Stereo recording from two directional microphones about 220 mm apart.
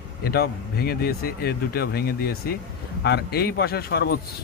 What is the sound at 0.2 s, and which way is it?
Speech, 45° left (ahead or behind).